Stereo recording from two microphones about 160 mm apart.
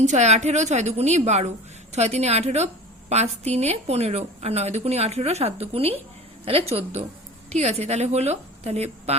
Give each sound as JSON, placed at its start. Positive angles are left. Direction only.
{"t": 0.0, "sound": "a woman's voice", "side_deg": -45}